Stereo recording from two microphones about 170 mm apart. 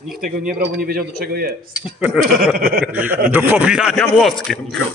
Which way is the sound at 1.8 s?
5° right (ahead or behind).